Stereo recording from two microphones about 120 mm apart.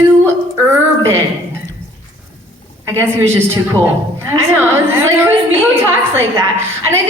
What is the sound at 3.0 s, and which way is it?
A woman's voice, 20° right (ahead or behind).